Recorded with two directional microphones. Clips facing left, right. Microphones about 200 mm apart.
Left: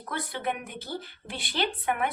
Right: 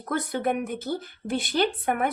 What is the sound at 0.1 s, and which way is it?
A woman's voice, 45° right (ahead or behind).